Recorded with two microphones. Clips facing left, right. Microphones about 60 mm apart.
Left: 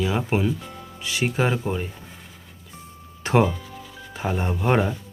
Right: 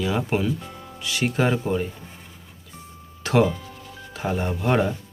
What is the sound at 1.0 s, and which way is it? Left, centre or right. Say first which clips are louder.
Speech: even; left.